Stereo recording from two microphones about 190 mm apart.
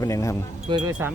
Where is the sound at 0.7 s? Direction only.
25° right (ahead or behind).